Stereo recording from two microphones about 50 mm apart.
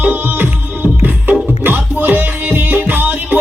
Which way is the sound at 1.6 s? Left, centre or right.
Right.